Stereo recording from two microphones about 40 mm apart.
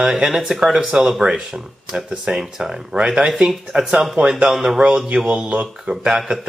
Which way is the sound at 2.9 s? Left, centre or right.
Right.